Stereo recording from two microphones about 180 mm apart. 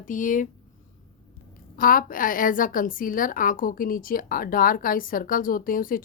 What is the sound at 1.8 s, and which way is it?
Speech, 50° left (ahead or behind).